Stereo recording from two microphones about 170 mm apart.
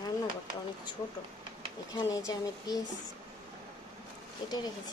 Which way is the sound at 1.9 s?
20° left (ahead or behind).